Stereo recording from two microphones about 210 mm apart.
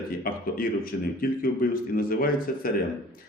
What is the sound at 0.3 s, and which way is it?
A man's voice, 45° left (ahead or behind).